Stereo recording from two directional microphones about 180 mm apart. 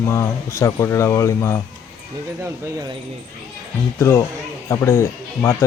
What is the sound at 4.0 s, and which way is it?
Speech, 15° left (ahead or behind).